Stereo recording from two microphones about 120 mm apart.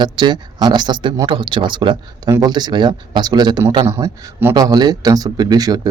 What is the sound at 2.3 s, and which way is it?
Speech, 30° right (ahead or behind).